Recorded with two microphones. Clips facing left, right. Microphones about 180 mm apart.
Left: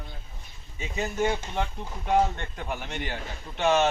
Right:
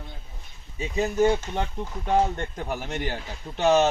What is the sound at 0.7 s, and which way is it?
Speech, 35° right (ahead or behind).